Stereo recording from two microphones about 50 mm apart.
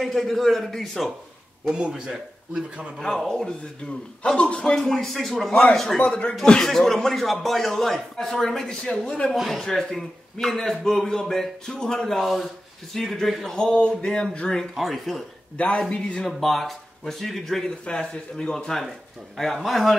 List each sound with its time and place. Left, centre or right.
0.0 s speech: centre
1.7 s speech: centre
3.3 s a man's voice: centre
4.4 s speech: left
4.8 s speech: centre
5.5 s speech: left
6.4 s a man's voice: centre
6.7 s speech: centre
9.3 s a man's voice: centre
12.2 s a man's voice: centre
14.8 s speech: centre
15.5 s speech: left
16.3 s speech: centre
17.6 s a man's voice: centre